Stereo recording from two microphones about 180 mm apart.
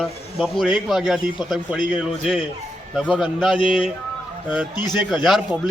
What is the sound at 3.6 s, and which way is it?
Speech, 30° left (ahead or behind).